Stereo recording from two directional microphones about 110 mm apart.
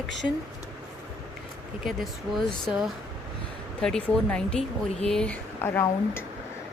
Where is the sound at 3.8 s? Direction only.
10° left (ahead or behind).